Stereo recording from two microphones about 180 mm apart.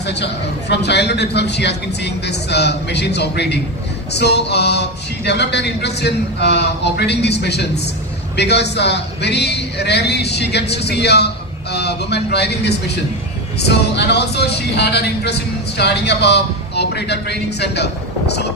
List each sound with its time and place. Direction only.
0.0 s speech: 70° left (ahead or behind)